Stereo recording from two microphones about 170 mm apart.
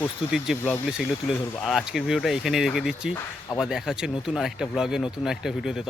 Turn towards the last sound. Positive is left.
turn(degrees=0)  # may be behind; listen again after turning